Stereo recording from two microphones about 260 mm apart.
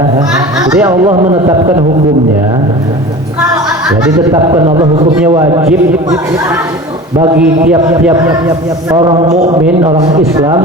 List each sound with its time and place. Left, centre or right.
0.7 s speech: centre
1.0 s speech: right
3.8 s a man's voice: centre
7.3 s a man's voice: centre